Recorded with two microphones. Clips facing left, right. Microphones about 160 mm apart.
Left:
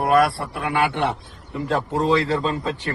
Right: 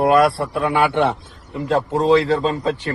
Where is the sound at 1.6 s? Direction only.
20° right (ahead or behind).